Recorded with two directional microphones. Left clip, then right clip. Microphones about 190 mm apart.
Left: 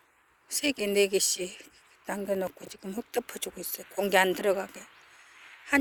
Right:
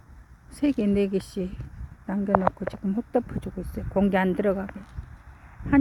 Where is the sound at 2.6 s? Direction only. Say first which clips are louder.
Right 8 dB; 15° left (ahead or behind).